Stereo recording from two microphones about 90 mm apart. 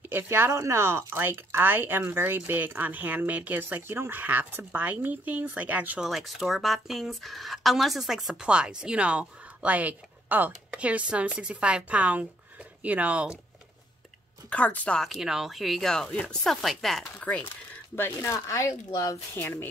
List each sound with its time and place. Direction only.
0.1 s speech: 25° right (ahead or behind)
5.9 s speech: centre (ahead or behind)
14.5 s speech: 15° left (ahead or behind)
15.0 s speech: 5° right (ahead or behind)
17.2 s speech: 15° left (ahead or behind); by 19.1 s 40° left (ahead or behind)
19.4 s speech: 25° left (ahead or behind)